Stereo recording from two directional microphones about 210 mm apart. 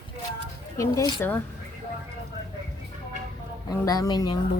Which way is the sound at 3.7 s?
15° left (ahead or behind).